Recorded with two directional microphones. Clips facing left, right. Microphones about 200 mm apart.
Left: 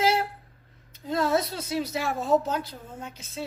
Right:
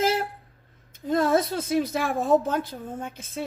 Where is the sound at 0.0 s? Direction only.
50° right (ahead or behind).